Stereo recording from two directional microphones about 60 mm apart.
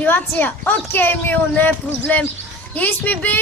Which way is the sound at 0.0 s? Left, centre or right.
Left.